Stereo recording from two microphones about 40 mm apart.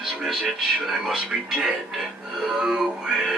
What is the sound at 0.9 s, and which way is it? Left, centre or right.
Speech, centre.